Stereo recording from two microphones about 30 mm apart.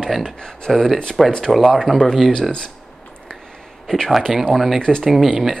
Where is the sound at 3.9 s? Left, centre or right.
Left.